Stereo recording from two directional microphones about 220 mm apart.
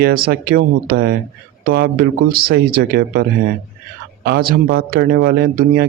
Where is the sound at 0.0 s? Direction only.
45° right (ahead or behind).